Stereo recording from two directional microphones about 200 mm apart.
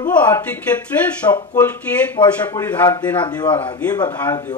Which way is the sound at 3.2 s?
20° left (ahead or behind).